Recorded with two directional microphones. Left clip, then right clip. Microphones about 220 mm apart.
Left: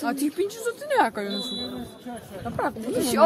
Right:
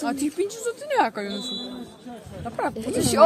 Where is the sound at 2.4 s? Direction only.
10° right (ahead or behind).